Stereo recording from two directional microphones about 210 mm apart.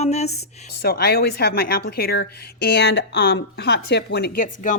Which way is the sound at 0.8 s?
50° left (ahead or behind).